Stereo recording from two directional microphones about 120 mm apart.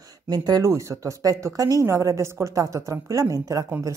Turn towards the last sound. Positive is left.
turn(degrees=-30)  # may be behind; listen again after turning